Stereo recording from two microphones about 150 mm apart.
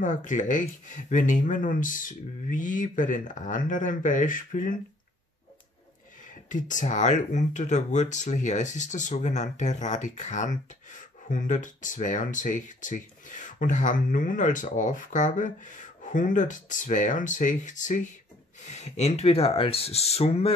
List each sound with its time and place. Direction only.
0.0 s speech: 60° left (ahead or behind)
6.5 s speech: 55° left (ahead or behind)